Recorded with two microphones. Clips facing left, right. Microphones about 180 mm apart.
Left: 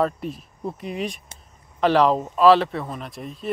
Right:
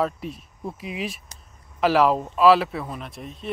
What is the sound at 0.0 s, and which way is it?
Speech, centre (ahead or behind).